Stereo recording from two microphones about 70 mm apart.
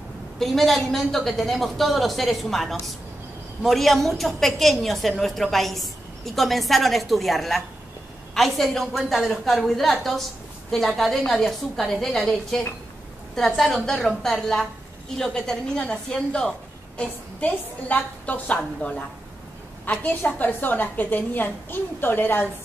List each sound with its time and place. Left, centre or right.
0.4 s a woman's voice: centre; by 22.5 s left